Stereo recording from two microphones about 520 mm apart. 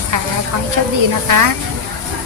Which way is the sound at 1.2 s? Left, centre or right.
Right.